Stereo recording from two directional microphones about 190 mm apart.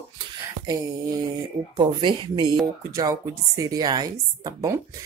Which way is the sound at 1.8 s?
25° right (ahead or behind).